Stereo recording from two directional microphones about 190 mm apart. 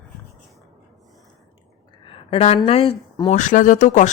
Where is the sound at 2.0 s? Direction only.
30° left (ahead or behind).